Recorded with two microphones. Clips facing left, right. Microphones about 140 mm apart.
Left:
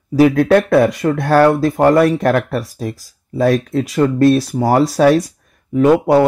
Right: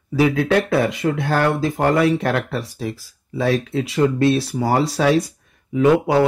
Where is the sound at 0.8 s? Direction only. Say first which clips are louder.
Left 5 dB; 45° left (ahead or behind).